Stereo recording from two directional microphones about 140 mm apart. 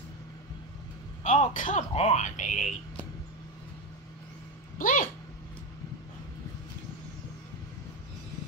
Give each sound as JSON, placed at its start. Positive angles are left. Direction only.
{"t": 1.2, "sound": "speech", "side_deg": 60}
{"t": 4.7, "sound": "speech", "side_deg": 75}